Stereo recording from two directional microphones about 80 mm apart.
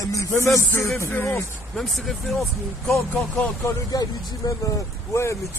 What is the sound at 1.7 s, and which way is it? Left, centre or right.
Speech, centre.